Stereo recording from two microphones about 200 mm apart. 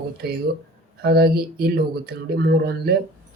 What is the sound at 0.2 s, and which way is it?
Speech, 50° right (ahead or behind).